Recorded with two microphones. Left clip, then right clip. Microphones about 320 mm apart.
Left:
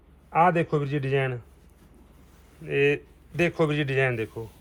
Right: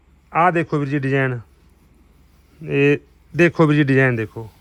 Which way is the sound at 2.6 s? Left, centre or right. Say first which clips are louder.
Right 6 dB; right.